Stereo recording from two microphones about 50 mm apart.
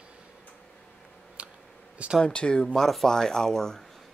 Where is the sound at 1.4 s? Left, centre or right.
Right.